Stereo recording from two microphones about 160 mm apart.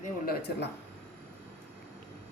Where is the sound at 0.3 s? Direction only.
90° left.